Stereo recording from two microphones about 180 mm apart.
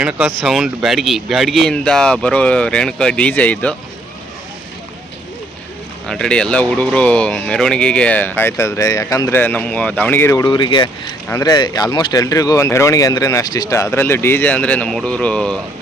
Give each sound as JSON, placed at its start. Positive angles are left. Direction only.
{"t": 0.0, "sound": "speech", "side_deg": -5}
{"t": 6.1, "sound": "speech", "side_deg": 5}